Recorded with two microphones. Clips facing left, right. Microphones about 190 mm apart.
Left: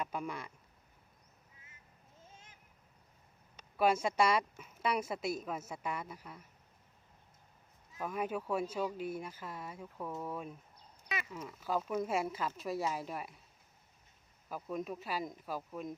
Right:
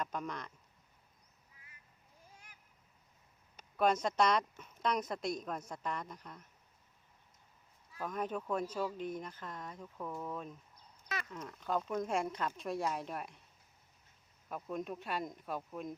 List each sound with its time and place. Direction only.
0.0 s speech: 10° left (ahead or behind)
2.2 s a sound: 25° left (ahead or behind)
3.8 s speech: 5° left (ahead or behind)
8.0 s speech: 10° left (ahead or behind)
14.5 s speech: centre (ahead or behind)